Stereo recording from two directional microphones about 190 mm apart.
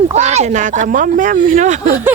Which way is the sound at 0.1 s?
35° right (ahead or behind).